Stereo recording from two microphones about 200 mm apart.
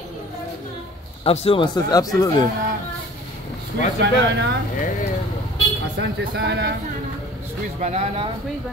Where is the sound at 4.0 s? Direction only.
60° right (ahead or behind).